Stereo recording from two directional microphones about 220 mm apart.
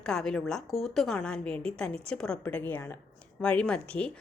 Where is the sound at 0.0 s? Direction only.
Centre (ahead or behind).